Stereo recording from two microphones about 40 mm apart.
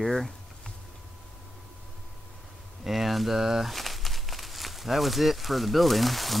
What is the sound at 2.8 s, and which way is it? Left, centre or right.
Speech, centre.